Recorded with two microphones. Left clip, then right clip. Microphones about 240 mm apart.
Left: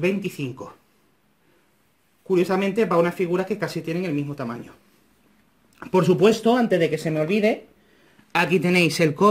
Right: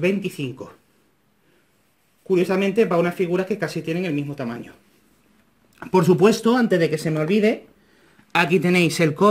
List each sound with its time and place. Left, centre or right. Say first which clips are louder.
0.3 s speech: right 1 dB; centre
2.3 s speech: right 2 dB; centre
5.8 s speech: right 2 dB; centre
8.3 s speech: right 2 dB; centre